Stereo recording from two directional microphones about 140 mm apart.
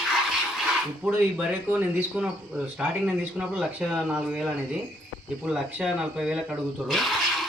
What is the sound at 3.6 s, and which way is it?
Speech, 5° right (ahead or behind).